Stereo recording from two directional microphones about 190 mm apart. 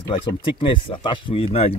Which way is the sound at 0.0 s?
25° left (ahead or behind).